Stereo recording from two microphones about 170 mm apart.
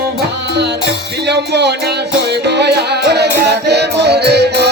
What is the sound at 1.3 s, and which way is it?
Music, 80° right.